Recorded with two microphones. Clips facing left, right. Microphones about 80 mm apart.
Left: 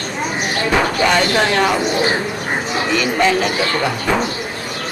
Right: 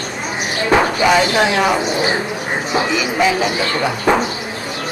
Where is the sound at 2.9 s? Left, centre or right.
Centre.